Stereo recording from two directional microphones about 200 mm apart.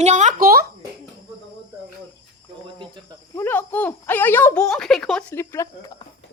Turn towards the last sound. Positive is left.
turn(degrees=10)  # may be behind; listen again after turning